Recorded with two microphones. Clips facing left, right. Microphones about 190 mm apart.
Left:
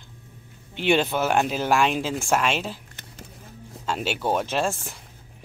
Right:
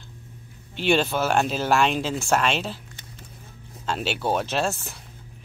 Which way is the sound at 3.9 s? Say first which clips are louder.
Even; 10° left (ahead or behind).